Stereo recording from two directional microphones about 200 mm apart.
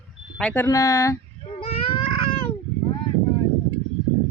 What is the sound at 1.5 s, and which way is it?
Baby cry, 25° left (ahead or behind).